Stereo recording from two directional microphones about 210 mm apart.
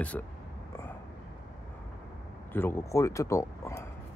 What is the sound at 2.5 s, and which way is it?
Speech, 10° left (ahead or behind).